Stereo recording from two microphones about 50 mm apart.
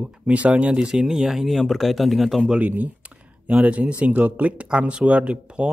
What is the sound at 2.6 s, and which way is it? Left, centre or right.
A man's voice, right.